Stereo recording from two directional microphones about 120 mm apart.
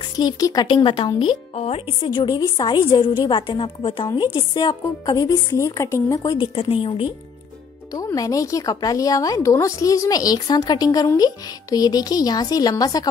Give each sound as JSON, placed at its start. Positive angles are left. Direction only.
{"t": 0.1, "sound": "a woman's voice", "side_deg": 35}
{"t": 1.5, "sound": "a woman's voice", "side_deg": 55}
{"t": 2.0, "sound": "a woman's voice", "side_deg": 35}
{"t": 4.6, "sound": "speech", "side_deg": 30}
{"t": 6.3, "sound": "a woman's voice", "side_deg": 50}
{"t": 7.9, "sound": "a woman's voice", "side_deg": 30}